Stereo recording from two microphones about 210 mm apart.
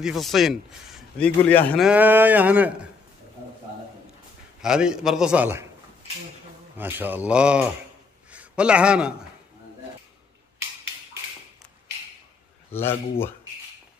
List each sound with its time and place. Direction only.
0.0 s a man's voice: centre (ahead or behind)
1.9 s a sound: 10° right (ahead or behind)
4.6 s a man's voice: 5° right (ahead or behind)
6.8 s a sound: 10° right (ahead or behind)
8.3 s a man's voice: 5° right (ahead or behind)
12.7 s speech: 10° left (ahead or behind)